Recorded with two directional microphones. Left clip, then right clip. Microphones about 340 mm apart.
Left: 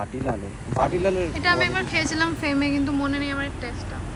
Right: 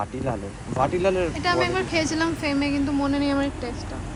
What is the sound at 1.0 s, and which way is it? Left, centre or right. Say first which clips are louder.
Speech: right 1 dB; centre.